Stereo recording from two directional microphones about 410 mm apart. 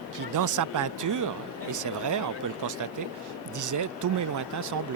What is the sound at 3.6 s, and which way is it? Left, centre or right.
Speech, right.